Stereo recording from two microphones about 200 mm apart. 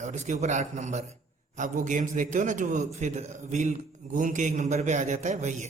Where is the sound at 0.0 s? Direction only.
35° right (ahead or behind).